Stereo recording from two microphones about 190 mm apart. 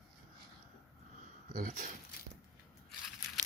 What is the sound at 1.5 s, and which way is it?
Speech, 45° right (ahead or behind).